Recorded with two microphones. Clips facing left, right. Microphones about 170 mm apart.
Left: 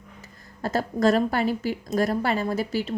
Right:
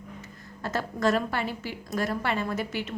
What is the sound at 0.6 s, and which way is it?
A woman's voice, 35° left (ahead or behind).